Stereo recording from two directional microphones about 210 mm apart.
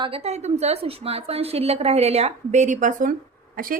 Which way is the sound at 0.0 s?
30° right (ahead or behind).